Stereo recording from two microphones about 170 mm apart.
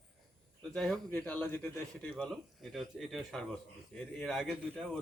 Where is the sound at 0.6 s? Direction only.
5° left (ahead or behind).